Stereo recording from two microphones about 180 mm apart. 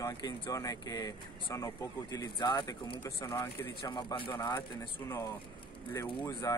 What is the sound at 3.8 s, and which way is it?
Speech, 25° left (ahead or behind).